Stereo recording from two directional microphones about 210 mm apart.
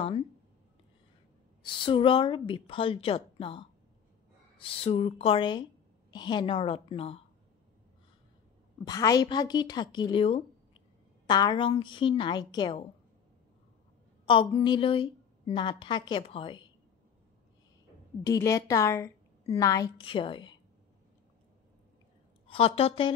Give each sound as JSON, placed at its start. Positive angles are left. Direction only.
{"t": 1.6, "sound": "a woman's voice", "side_deg": 25}
{"t": 8.8, "sound": "a woman's voice", "side_deg": 15}
{"t": 14.2, "sound": "a woman's voice", "side_deg": 25}
{"t": 18.2, "sound": "a woman's voice", "side_deg": 15}
{"t": 22.5, "sound": "a woman's voice", "side_deg": 25}